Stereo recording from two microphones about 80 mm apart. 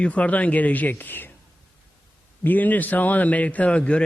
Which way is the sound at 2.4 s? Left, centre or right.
Left.